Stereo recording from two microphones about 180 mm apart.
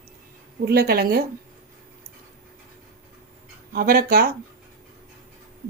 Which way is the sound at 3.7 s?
55° right (ahead or behind).